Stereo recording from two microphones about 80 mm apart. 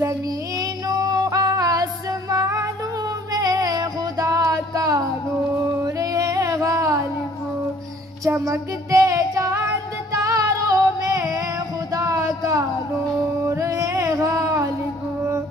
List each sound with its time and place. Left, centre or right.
0.0 s female singing: right
3.3 s music: right
5.8 s a sound: right
8.4 s music: right
11.9 s a sound: right
13.5 s music: right